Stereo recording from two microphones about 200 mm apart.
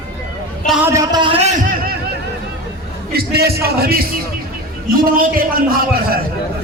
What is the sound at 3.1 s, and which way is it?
Speech, 50° right (ahead or behind).